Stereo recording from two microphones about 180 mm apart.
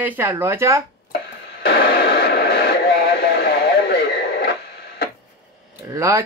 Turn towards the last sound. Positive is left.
turn(degrees=-15)  # may be behind; listen again after turning